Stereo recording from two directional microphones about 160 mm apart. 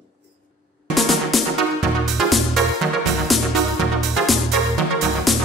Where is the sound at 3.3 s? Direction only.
Centre (ahead or behind).